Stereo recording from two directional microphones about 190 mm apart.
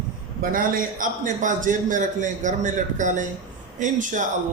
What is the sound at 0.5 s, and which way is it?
Speech, 45° right (ahead or behind).